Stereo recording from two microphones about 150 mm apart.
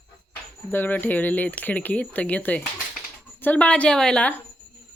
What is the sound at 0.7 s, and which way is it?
Speech, 10° left (ahead or behind).